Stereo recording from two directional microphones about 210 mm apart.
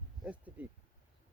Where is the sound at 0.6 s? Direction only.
5° right (ahead or behind).